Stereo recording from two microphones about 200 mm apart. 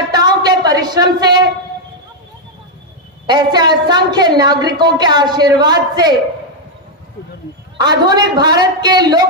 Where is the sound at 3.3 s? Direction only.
20° right (ahead or behind).